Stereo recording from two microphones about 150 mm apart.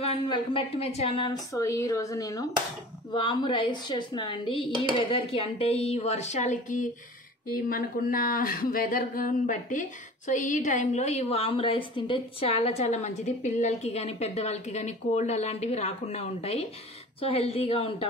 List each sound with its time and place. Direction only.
0.0 s a woman's voice: 40° left (ahead or behind)
1.5 s a woman's voice: 20° left (ahead or behind); by 6.9 s 55° left (ahead or behind)
7.5 s a woman's voice: 70° left (ahead or behind); by 18.0 s 40° left (ahead or behind)